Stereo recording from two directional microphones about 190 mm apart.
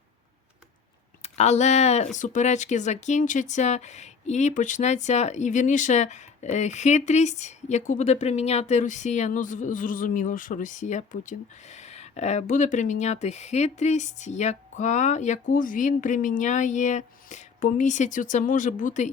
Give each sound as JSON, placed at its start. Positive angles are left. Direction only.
{"t": 1.2, "sound": "speech", "side_deg": 35}